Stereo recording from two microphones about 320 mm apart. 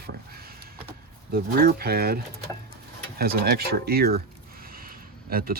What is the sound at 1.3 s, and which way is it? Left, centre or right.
Speech, right.